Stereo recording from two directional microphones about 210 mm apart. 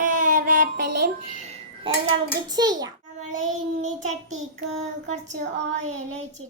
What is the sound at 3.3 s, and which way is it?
Child singing, 35° right (ahead or behind).